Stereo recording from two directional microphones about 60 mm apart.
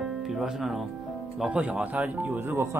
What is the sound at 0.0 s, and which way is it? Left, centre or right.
Music, centre.